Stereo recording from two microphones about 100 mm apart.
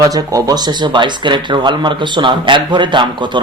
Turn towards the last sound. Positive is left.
turn(degrees=-50)  # may be behind; listen again after turning